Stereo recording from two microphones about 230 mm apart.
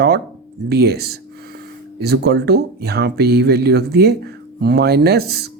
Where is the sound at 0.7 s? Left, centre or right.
Right.